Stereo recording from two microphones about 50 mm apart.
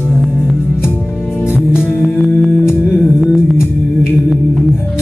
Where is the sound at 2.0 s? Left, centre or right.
Centre.